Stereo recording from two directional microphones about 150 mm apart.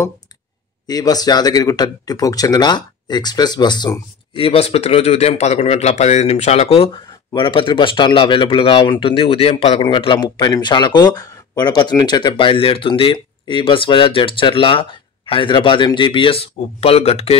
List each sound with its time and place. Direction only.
0.8 s a man's voice: 25° left (ahead or behind); by 17.4 s 40° left (ahead or behind)